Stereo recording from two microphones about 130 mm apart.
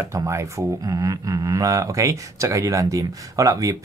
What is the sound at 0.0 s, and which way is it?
Speech, 20° right (ahead or behind).